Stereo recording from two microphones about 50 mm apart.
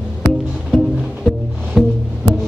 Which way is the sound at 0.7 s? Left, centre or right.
Centre.